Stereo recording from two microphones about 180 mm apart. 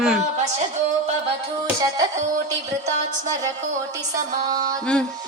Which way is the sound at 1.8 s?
20° right (ahead or behind).